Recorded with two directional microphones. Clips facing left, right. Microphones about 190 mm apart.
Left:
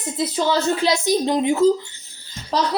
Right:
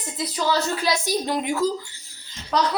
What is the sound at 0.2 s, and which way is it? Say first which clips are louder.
Speech: left 3 dB; 25° left (ahead or behind).